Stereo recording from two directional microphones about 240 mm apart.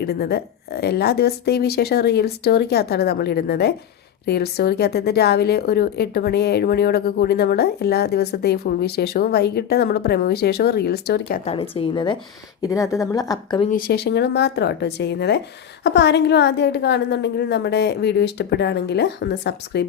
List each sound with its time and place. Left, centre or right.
0.0 s a woman's voice: left
11.4 s a woman's voice: left
13.7 s a woman's voice: left